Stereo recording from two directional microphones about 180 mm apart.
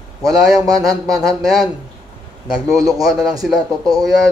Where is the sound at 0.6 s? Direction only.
20° right (ahead or behind).